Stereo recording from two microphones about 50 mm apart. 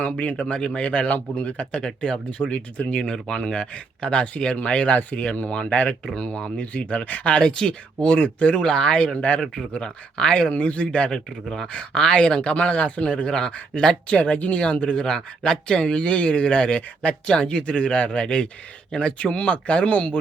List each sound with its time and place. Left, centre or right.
0.0 s speech: left
0.4 s speech: centre
7.4 s speech: centre
10.5 s speech: left